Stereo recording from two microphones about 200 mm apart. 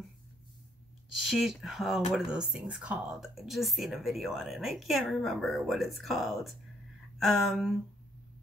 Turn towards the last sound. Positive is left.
turn(degrees=0)  # may be behind; listen again after turning